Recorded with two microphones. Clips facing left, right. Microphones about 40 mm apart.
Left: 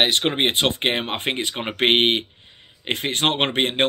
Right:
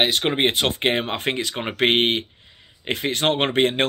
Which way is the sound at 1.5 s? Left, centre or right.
Centre.